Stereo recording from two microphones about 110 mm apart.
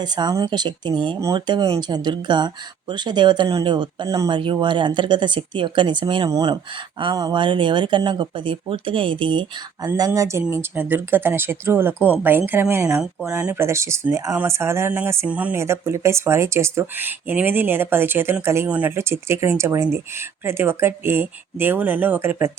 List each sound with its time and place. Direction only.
0.0 s speech: 40° right (ahead or behind)
4.3 s speech: 50° right (ahead or behind)
10.1 s speech: 25° right (ahead or behind)
15.6 s speech: 25° right (ahead or behind)